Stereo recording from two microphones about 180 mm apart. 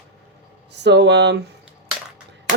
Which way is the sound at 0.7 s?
70° right (ahead or behind).